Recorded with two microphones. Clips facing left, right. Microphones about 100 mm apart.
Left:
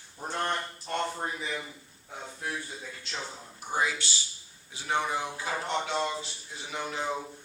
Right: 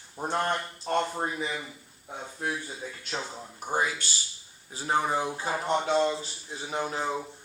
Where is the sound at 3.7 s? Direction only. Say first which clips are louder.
Right 1 dB; 45° right (ahead or behind).